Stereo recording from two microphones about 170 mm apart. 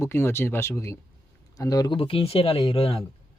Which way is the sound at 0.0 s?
15° left (ahead or behind).